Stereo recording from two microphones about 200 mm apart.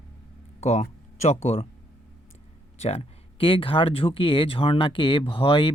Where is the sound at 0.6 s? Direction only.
35° left (ahead or behind).